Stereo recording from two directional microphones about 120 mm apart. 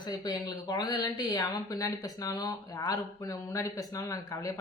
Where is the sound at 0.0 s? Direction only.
35° left (ahead or behind).